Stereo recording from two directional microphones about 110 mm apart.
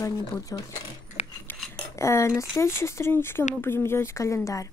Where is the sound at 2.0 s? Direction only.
25° left (ahead or behind).